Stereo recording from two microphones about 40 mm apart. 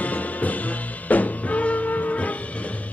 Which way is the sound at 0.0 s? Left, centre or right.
Left.